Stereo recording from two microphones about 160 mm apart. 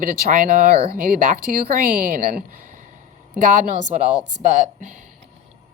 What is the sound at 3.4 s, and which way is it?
A woman's voice, 55° right (ahead or behind).